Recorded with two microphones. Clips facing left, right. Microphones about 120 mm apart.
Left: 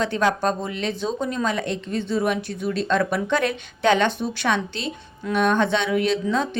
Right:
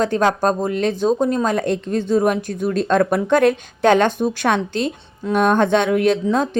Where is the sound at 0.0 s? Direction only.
40° right (ahead or behind).